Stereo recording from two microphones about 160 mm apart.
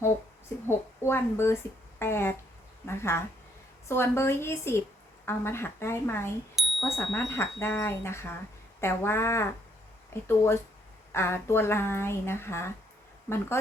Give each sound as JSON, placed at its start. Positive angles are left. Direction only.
{"t": 0.5, "sound": "speech", "side_deg": 15}
{"t": 6.6, "sound": "bicycle bell", "side_deg": 0}
{"t": 7.1, "sound": "speech", "side_deg": 15}